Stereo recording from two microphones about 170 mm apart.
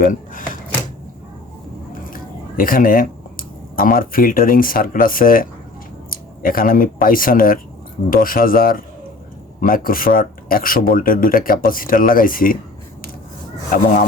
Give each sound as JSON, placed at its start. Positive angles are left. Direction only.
{"t": 0.0, "sound": "drawer open or close", "side_deg": 55}
{"t": 1.9, "sound": "speech", "side_deg": 55}